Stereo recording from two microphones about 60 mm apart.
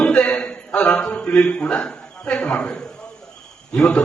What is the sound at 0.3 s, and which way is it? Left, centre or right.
A man's voice, centre.